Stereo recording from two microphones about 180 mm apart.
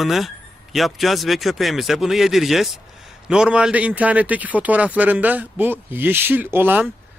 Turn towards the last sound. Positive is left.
turn(degrees=-10)  # may be behind; listen again after turning